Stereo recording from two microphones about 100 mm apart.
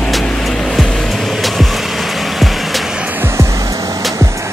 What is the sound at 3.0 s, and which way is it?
Music, 20° right (ahead or behind).